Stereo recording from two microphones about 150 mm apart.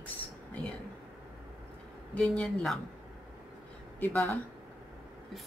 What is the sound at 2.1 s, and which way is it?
Speech, 5° left (ahead or behind).